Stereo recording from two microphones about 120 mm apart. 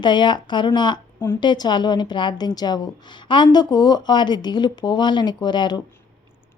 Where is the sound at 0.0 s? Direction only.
40° left (ahead or behind).